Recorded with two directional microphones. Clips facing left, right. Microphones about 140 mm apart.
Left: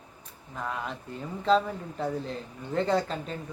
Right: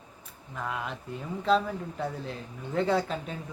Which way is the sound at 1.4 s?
Centre (ahead or behind).